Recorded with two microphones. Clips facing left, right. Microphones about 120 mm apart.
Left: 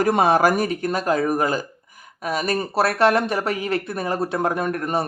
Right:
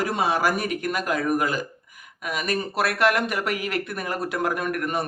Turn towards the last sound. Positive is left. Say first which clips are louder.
# left 3 dB
turn(degrees=30)  # may be behind; listen again after turning